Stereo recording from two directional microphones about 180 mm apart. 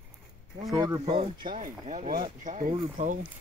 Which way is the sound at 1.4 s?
50° right (ahead or behind).